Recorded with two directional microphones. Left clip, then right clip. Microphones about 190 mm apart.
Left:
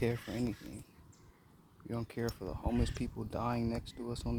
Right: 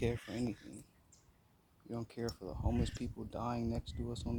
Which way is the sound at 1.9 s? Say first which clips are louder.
Left 3 dB; 5° right (ahead or behind).